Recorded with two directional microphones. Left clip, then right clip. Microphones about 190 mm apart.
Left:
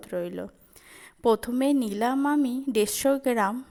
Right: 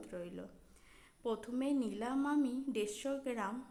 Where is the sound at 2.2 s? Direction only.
25° left (ahead or behind).